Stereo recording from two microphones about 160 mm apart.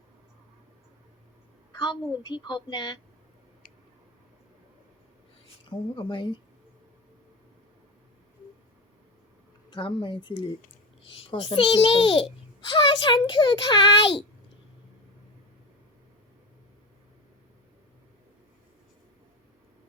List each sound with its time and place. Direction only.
1.7 s a child's voice: 30° left (ahead or behind)
5.6 s a child's voice: 30° left (ahead or behind)
9.6 s a child's voice: 30° left (ahead or behind)